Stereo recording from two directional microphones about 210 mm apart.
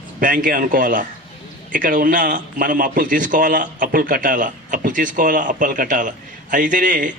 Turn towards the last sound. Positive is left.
turn(degrees=-40)  # may be behind; listen again after turning